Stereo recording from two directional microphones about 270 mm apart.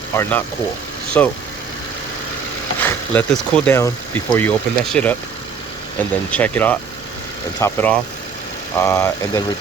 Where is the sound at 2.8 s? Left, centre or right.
Centre.